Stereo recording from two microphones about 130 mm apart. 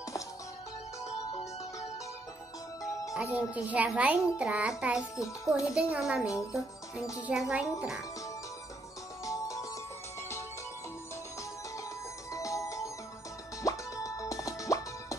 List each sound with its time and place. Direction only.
1.0 s music: 55° left (ahead or behind)
3.2 s a child's voice: 10° right (ahead or behind)
7.2 s speech: 5° right (ahead or behind)
9.2 s music: 25° left (ahead or behind)
12.3 s music: 25° left (ahead or behind)
13.6 s plop: 25° left (ahead or behind)